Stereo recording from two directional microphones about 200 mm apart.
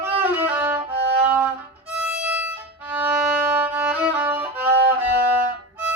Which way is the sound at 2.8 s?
10° right (ahead or behind).